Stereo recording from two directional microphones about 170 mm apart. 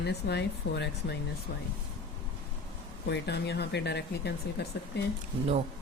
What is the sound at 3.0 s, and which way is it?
Speech, 80° left.